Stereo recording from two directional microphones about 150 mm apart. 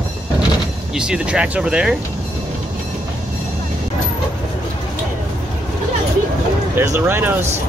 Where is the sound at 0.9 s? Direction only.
5° right (ahead or behind).